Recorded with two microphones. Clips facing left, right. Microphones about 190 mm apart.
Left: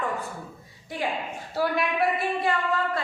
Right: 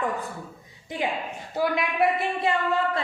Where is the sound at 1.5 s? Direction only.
20° right (ahead or behind).